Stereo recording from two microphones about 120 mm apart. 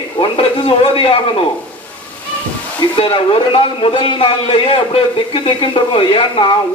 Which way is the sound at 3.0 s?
50° left (ahead or behind).